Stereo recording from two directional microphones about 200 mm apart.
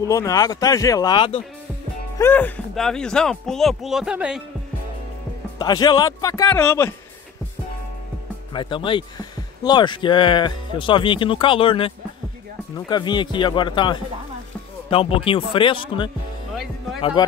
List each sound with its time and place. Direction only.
0.0 s speech: 15° left (ahead or behind)
2.1 s speech: 10° left (ahead or behind)
5.6 s speech: 20° left (ahead or behind)
8.5 s speech: 25° left (ahead or behind)